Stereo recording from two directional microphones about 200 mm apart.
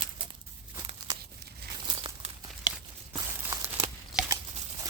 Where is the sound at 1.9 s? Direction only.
25° right (ahead or behind).